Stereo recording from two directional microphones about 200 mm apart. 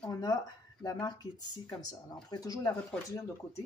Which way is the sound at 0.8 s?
20° left (ahead or behind).